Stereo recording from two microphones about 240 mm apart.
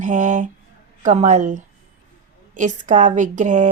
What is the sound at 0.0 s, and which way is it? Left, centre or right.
A woman's voice, right.